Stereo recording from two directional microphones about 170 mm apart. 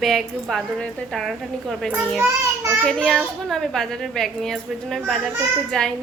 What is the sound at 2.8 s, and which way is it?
A child's voice, centre (ahead or behind).